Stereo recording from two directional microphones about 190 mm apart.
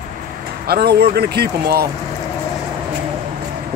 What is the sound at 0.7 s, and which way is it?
Speech, 55° right (ahead or behind).